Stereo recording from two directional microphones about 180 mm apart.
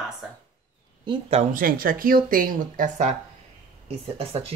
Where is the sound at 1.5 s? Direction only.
50° right (ahead or behind).